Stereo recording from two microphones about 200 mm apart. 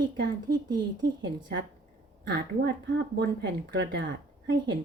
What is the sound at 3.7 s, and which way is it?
Speech, 60° right (ahead or behind).